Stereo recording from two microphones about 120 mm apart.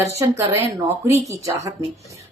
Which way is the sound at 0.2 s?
25° right (ahead or behind).